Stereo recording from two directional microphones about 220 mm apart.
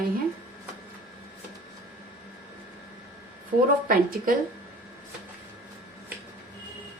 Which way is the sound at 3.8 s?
40° right (ahead or behind).